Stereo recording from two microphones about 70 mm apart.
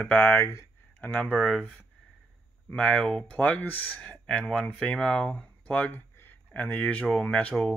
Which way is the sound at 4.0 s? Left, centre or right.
Centre.